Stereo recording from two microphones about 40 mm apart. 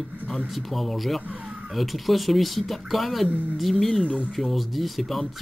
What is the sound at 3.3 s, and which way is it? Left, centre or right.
Speech, right.